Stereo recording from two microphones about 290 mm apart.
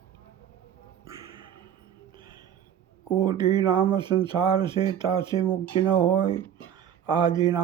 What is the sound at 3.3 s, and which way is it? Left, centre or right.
Speech, centre.